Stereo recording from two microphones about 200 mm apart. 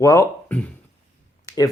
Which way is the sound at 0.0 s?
15° left (ahead or behind).